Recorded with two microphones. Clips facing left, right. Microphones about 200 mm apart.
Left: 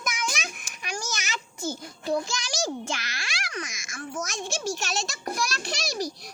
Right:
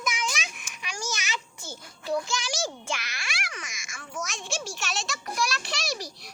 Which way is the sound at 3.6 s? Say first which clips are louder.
Left 8 dB; 40° left (ahead or behind).